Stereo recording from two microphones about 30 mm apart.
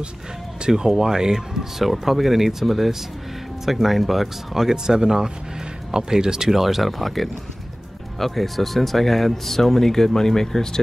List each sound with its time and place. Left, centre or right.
0.7 s speech: right
1.9 s speech: centre
4.6 s speech: right
6.5 s speech: centre